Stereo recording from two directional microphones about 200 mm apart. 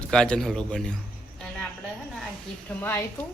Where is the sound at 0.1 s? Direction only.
5° left (ahead or behind).